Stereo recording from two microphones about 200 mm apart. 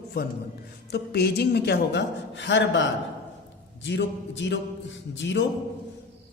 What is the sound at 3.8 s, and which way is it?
A woman's voice, 65° left (ahead or behind).